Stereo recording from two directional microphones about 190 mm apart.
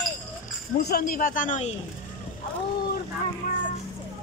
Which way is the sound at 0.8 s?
55° left (ahead or behind).